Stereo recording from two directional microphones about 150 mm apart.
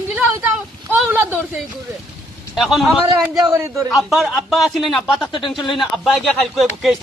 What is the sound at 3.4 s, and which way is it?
Speech, 20° right (ahead or behind).